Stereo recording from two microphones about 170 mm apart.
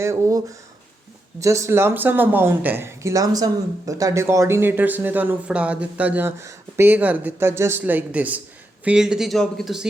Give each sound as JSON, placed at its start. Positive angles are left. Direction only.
{"t": 0.0, "sound": "speech", "side_deg": -20}